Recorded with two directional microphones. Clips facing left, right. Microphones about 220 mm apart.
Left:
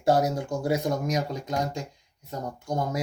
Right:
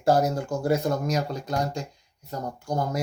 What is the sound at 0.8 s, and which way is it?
Speech, 15° left (ahead or behind).